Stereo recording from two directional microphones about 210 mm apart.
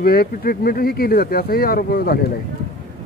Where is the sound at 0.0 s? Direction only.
45° left (ahead or behind).